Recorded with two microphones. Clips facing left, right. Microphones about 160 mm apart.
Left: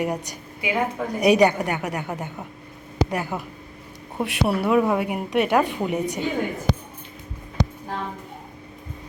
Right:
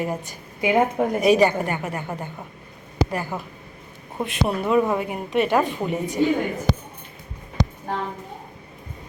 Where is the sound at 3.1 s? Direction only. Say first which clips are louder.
Left 1 dB; 15° left (ahead or behind).